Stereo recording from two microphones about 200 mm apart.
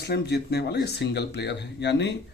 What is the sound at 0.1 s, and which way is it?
Speech, 55° left (ahead or behind).